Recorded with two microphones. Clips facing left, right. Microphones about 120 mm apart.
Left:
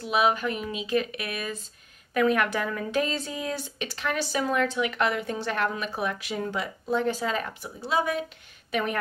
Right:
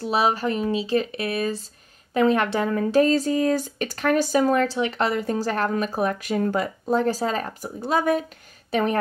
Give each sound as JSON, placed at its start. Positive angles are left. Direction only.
{"t": 0.0, "sound": "speech", "side_deg": -35}
{"t": 8.7, "sound": "speech", "side_deg": -35}